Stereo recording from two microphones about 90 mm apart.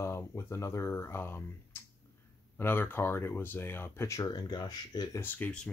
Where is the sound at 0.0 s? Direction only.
30° left (ahead or behind).